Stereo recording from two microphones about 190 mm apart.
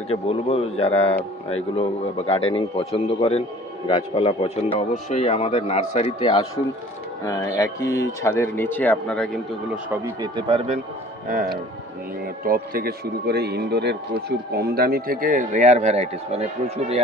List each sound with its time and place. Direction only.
0.1 s speech: 30° left (ahead or behind); by 9.4 s 5° left (ahead or behind)
9.8 s speech: 15° right (ahead or behind)
11.2 s speech: 45° right (ahead or behind)